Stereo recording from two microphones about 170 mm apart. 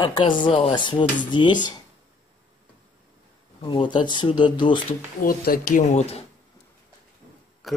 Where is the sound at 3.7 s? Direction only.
30° left (ahead or behind).